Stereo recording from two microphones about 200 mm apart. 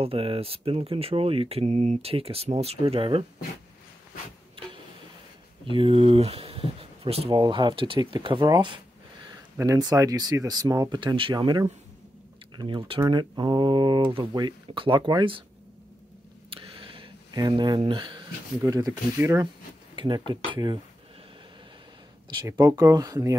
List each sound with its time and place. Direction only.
0.0 s speech: 30° right (ahead or behind)
5.7 s speech: 25° right (ahead or behind)
16.4 s speech: 25° right (ahead or behind)
22.4 s speech: 20° right (ahead or behind)